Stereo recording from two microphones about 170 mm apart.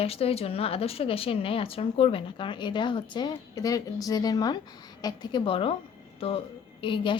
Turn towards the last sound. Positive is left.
turn(degrees=30)  # may be behind; listen again after turning